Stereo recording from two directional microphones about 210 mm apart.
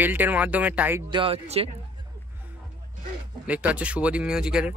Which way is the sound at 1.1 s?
25° right (ahead or behind).